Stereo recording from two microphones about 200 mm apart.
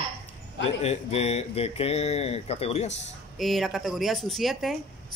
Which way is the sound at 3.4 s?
Centre (ahead or behind).